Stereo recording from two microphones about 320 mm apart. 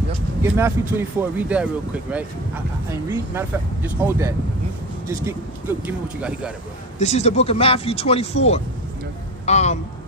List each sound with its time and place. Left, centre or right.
0.4 s speech: centre
3.1 s speech: centre
5.9 s speech: centre
7.0 s speech: left